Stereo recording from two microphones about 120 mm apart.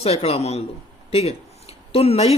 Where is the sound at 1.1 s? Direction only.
55° left (ahead or behind).